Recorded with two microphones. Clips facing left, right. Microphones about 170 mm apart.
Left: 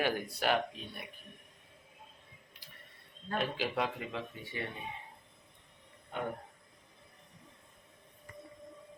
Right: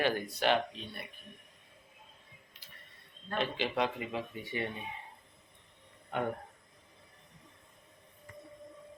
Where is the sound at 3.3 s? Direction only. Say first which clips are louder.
Right 1 dB; 5° left (ahead or behind).